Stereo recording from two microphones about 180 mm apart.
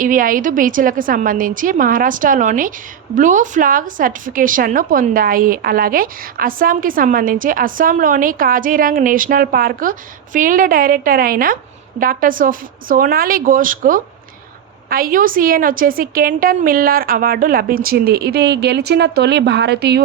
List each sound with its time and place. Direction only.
0.0 s a woman's voice: 50° right (ahead or behind); by 20.0 s 65° right (ahead or behind)